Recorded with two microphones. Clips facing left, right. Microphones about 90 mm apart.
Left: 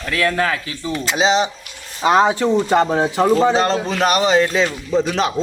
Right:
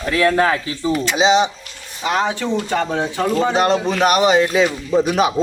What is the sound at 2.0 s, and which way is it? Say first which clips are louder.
Speech: left 5 dB; 35° left (ahead or behind).